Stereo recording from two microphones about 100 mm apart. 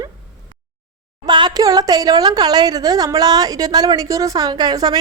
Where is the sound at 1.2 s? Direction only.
45° right (ahead or behind).